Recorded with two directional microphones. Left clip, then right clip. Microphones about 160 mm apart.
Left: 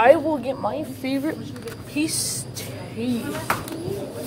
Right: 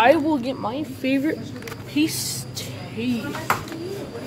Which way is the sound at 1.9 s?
10° right (ahead or behind).